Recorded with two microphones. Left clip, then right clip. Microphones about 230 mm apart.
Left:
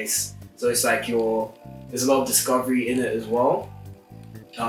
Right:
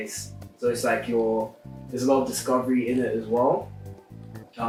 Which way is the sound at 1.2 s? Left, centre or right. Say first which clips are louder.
Left 1 dB; right.